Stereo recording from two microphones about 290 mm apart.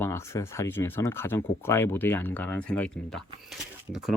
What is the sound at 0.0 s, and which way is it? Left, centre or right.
Speech, centre.